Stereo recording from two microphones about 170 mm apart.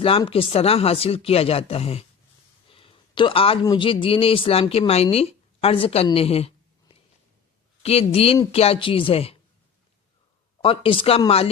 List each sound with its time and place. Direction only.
0.0 s speech: 35° left (ahead or behind)
6.1 s a sound: 35° left (ahead or behind)
7.8 s a woman's voice: 35° left (ahead or behind)
10.6 s speech: 30° left (ahead or behind)